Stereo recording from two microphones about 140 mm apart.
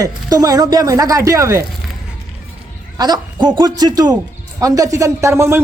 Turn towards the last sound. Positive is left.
turn(degrees=-20)  # may be behind; listen again after turning